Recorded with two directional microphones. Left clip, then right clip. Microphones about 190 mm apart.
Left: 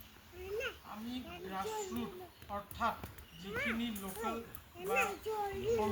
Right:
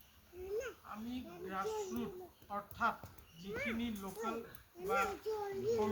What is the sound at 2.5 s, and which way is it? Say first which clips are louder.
Speech: even; 10° left (ahead or behind).